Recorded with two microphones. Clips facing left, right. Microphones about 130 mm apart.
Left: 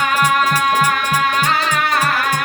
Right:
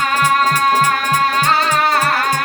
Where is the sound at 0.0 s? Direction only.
35° right (ahead or behind).